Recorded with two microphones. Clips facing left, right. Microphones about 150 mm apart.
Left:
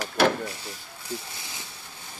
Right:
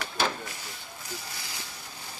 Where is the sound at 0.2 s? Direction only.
65° left (ahead or behind).